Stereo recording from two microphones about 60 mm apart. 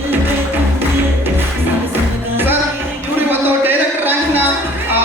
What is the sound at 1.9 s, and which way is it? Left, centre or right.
Music, right.